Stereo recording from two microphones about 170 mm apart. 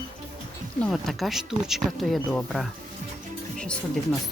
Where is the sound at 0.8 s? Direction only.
Centre (ahead or behind).